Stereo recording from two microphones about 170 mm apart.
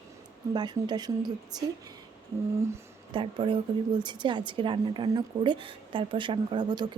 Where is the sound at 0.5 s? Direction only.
25° right (ahead or behind).